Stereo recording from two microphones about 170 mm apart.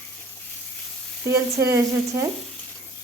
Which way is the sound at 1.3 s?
15° right (ahead or behind).